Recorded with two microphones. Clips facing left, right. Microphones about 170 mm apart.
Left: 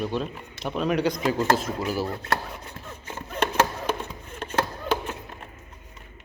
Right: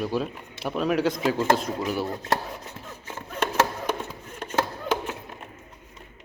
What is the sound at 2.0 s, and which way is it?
Speech, 20° right (ahead or behind).